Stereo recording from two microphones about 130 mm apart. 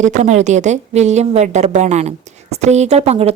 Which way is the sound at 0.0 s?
65° right (ahead or behind).